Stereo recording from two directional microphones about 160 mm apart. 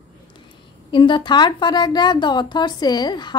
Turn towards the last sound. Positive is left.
turn(degrees=25)  # may be behind; listen again after turning